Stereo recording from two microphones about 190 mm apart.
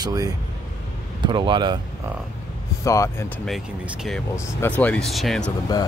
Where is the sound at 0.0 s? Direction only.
20° right (ahead or behind).